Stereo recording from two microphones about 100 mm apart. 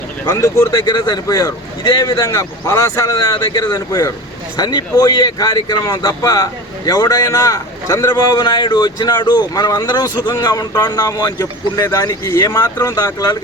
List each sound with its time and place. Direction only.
0.3 s speech: 30° left (ahead or behind)
8.1 s speech: 45° left (ahead or behind)